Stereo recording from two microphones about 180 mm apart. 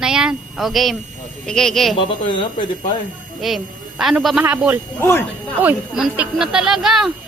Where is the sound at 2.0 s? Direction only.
25° left (ahead or behind).